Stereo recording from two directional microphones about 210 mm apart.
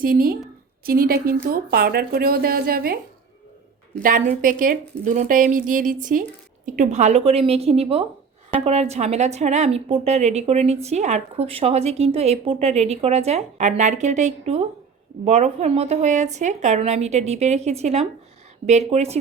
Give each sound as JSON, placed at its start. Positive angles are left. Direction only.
{"t": 0.0, "sound": "speech", "side_deg": -45}
{"t": 4.0, "sound": "a woman's voice", "side_deg": -40}